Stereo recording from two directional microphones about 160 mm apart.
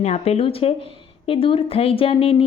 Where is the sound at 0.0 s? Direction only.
40° left (ahead or behind).